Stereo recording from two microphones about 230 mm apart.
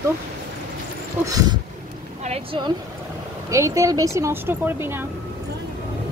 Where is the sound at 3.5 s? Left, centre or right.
Centre.